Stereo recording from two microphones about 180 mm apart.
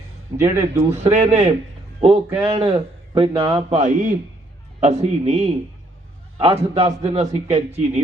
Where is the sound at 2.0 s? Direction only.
35° right (ahead or behind).